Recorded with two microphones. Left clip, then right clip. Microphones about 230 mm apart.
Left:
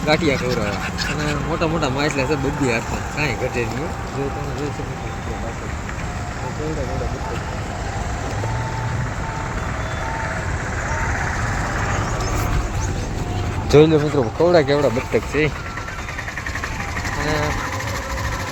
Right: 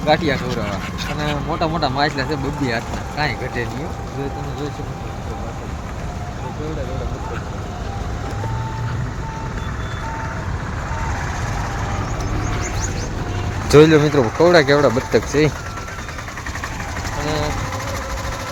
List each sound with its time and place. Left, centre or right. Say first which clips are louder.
0.0 s speech: right 1 dB; centre
0.5 s speech: left 2 dB; right
1.6 s speech: right 2 dB; centre
10.9 s vehicle: left 2 dB; left
13.7 s speech: right 3 dB; centre
17.2 s vehicle: even; right